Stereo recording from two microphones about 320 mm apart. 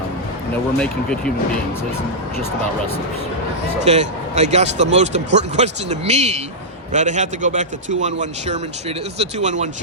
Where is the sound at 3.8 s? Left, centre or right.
Right.